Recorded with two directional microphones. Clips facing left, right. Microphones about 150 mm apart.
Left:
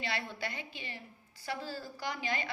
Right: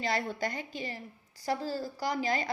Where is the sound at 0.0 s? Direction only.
40° right (ahead or behind).